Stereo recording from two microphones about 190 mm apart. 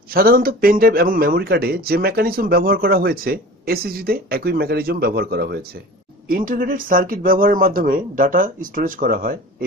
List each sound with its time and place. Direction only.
0.1 s speech: 50° right (ahead or behind)